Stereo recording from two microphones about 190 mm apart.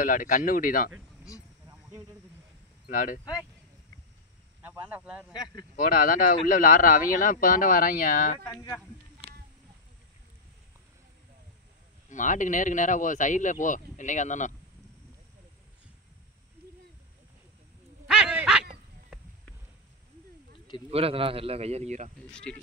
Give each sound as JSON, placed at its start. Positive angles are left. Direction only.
{"t": 0.0, "sound": "speech", "side_deg": 45}
{"t": 2.9, "sound": "speech", "side_deg": 45}
{"t": 4.6, "sound": "speech", "side_deg": -10}
{"t": 5.3, "sound": "speech", "side_deg": 20}
{"t": 5.8, "sound": "speech", "side_deg": 45}
{"t": 8.5, "sound": "speech", "side_deg": 20}
{"t": 12.1, "sound": "speech", "side_deg": 40}
{"t": 18.0, "sound": "a sound", "side_deg": -5}
{"t": 20.9, "sound": "speech", "side_deg": -30}
{"t": 22.3, "sound": "speech", "side_deg": 5}